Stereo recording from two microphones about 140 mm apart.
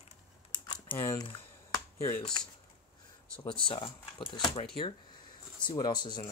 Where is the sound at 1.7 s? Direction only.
20° left (ahead or behind).